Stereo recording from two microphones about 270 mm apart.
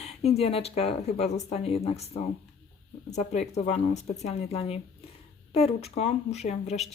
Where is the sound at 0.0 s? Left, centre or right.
Left.